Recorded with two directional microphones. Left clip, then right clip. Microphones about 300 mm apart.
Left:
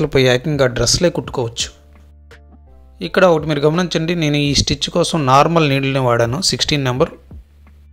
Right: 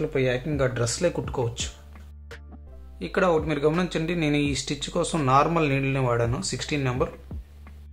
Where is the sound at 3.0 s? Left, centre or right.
Left.